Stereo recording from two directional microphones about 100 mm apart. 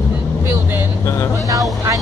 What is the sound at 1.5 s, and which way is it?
Speech, 35° right (ahead or behind).